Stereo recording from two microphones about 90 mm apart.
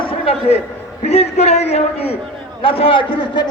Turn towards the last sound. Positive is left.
turn(degrees=65)  # may be behind; listen again after turning